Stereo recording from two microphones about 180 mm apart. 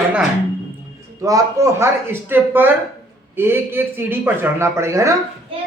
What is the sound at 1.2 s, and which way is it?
Speech, 20° right (ahead or behind).